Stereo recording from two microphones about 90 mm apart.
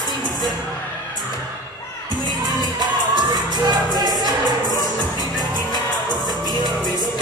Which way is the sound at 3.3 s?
50° right (ahead or behind).